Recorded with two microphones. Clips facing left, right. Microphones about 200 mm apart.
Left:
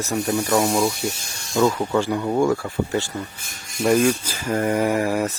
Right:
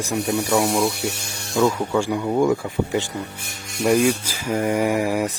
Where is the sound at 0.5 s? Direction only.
Centre (ahead or behind).